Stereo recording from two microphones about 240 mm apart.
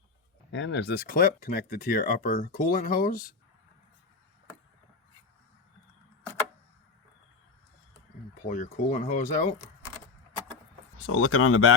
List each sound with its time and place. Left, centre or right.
0.5 s speech: left
8.4 s speech: left
11.0 s speech: left